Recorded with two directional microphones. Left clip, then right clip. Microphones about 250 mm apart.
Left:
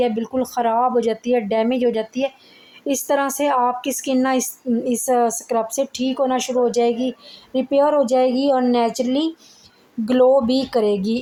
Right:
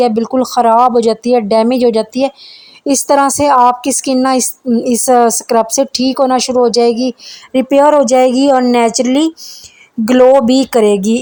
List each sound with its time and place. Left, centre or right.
0.0 s a woman's voice: right